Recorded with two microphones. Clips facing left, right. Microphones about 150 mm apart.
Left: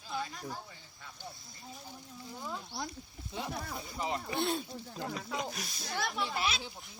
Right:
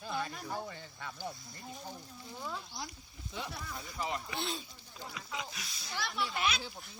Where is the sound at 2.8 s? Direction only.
65° left (ahead or behind).